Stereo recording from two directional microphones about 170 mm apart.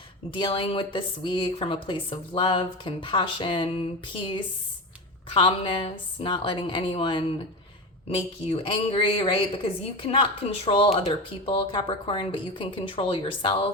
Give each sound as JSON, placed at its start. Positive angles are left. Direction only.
{"t": 0.3, "sound": "speech", "side_deg": 30}